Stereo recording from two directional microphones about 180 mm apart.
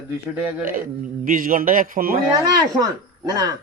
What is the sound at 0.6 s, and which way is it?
Speech, 50° right (ahead or behind).